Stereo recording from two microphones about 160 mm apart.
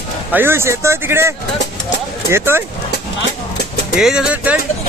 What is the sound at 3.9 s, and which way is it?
Speech, 5° right (ahead or behind).